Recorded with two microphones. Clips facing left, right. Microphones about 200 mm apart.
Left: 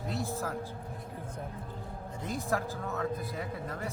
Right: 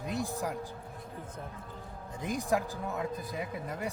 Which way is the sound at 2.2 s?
15° right (ahead or behind).